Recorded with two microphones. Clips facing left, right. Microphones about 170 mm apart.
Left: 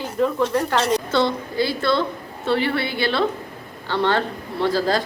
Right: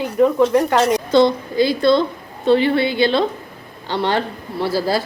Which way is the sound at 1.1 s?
15° right (ahead or behind).